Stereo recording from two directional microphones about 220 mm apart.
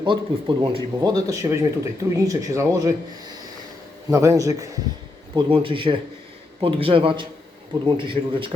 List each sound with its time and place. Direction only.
0.0 s speech: 20° right (ahead or behind)
4.1 s speech: 15° right (ahead or behind)